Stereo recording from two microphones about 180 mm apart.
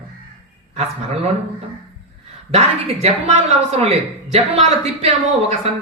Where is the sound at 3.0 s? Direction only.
40° right (ahead or behind).